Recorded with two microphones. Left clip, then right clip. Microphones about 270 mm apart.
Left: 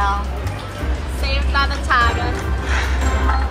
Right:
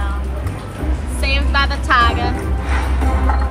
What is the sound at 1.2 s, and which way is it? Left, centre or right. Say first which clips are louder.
Vehicle: right 2 dB; right.